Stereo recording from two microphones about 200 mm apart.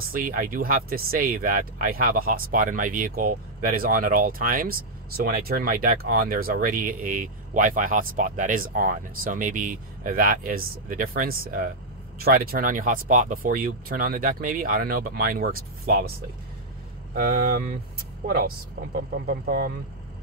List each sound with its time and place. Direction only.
0.1 s speech: 45° right (ahead or behind)
17.1 s speech: 45° right (ahead or behind)